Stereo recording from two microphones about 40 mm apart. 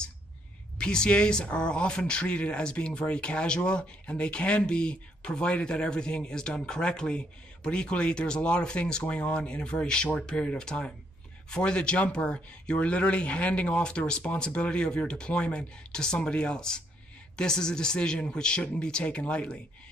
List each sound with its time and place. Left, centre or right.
0.7 s speech: left